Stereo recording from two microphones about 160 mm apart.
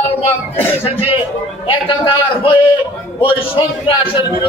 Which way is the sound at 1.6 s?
35° left (ahead or behind).